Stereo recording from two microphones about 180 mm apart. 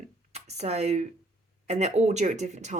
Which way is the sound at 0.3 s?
35° right (ahead or behind).